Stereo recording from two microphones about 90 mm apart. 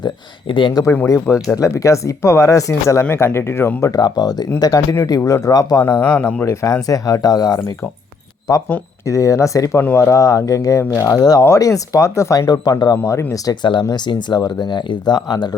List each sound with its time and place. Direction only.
0.0 s speech: 65° left (ahead or behind)
1.0 s speech: 35° left (ahead or behind)
3.9 s speech: 45° left (ahead or behind)
5.8 s speech: 25° left (ahead or behind)
6.4 s speech: 35° left (ahead or behind)
13.9 s speech: 55° left (ahead or behind)